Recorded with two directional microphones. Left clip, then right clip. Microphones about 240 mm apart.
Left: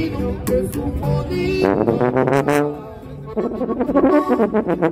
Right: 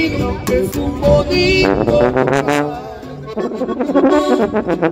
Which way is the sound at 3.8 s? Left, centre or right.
Left.